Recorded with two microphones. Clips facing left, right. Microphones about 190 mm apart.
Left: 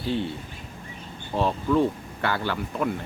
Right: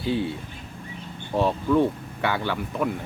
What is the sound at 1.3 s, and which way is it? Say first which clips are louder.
Speech: right 2 dB; 5° right (ahead or behind).